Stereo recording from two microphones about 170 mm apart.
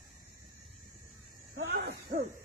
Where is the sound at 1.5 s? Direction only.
80° right.